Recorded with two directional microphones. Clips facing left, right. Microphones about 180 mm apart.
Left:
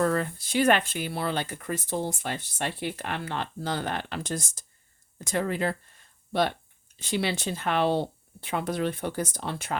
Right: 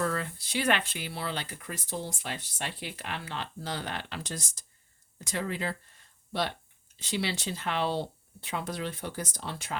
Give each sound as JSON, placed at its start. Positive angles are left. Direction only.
{"t": 0.0, "sound": "speech", "side_deg": 45}
{"t": 7.0, "sound": "speech", "side_deg": 50}